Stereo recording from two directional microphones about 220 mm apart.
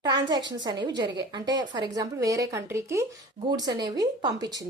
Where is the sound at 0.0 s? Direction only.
20° right (ahead or behind).